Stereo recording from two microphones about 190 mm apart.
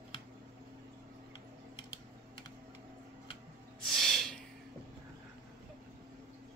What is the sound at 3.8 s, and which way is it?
Snort, centre (ahead or behind).